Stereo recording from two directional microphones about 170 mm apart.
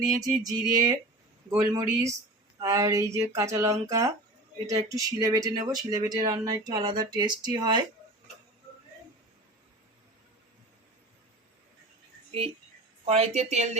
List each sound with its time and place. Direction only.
0.0 s speech: 20° right (ahead or behind)
12.3 s speech: 35° right (ahead or behind)